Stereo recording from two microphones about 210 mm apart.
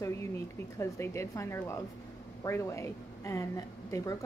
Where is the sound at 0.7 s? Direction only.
15° left (ahead or behind).